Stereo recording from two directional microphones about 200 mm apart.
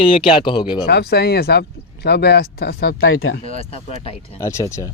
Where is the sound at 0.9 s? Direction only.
55° left (ahead or behind).